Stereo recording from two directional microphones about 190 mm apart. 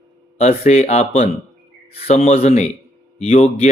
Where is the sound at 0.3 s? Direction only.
35° left (ahead or behind).